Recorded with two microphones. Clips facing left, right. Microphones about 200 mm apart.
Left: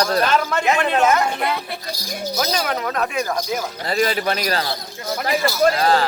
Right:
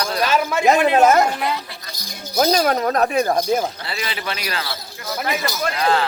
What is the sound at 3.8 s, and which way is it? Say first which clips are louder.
A man's voice: left 8 dB; 45° left (ahead or behind).